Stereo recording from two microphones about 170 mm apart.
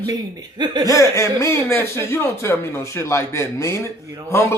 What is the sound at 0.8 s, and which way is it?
Speech, 20° left (ahead or behind).